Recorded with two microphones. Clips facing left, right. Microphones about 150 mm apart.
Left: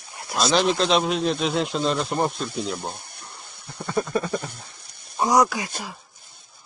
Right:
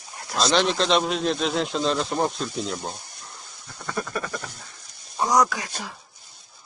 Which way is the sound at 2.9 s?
60° left (ahead or behind).